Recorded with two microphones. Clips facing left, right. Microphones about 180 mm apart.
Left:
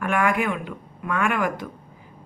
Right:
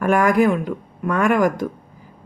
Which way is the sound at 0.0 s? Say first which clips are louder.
Right 7 dB; 40° right (ahead or behind).